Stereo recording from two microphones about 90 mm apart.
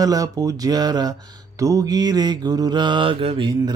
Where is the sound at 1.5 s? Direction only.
40° right (ahead or behind); by 3.5 s 85° right.